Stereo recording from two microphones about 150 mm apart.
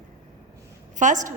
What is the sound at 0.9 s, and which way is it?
Speech, 55° right (ahead or behind).